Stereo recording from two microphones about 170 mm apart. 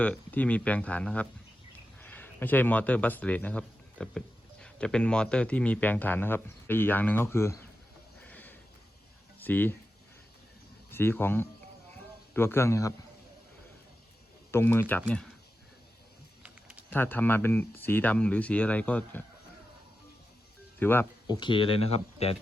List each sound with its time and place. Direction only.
0.0 s speech: 10° left (ahead or behind)
8.2 s a sound: 10° left (ahead or behind)
9.4 s speech: 10° left (ahead or behind)
10.9 s speech: 10° left (ahead or behind)
14.5 s speech: 15° left (ahead or behind)
16.4 s a sound: 5° right (ahead or behind)
16.9 s speech: 10° left (ahead or behind)
20.7 s speech: 10° left (ahead or behind)
21.2 s speech: 25° left (ahead or behind)